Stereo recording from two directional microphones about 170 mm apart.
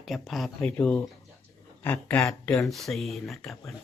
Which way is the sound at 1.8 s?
10° left (ahead or behind).